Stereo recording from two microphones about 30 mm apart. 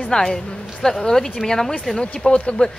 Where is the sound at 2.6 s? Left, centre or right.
Left.